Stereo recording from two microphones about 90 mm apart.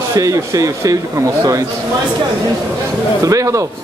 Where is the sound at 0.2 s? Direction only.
40° right (ahead or behind).